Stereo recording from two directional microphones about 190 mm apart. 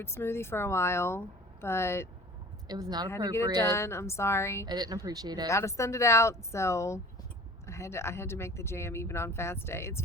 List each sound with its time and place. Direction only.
0.0 s speech: 10° left (ahead or behind)
2.6 s speech: 20° right (ahead or behind)
3.6 s speech: 15° left (ahead or behind)
4.6 s speech: 20° right (ahead or behind)
5.5 s speech: 15° left (ahead or behind)